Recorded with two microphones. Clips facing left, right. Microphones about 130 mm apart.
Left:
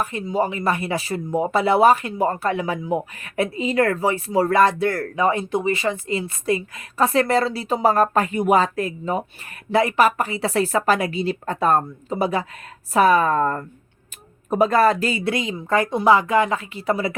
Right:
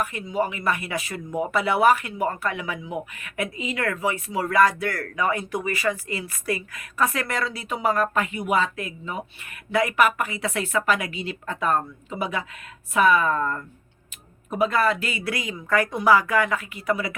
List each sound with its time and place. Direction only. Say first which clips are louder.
0.0 s speech: left 3 dB; 30° left (ahead or behind)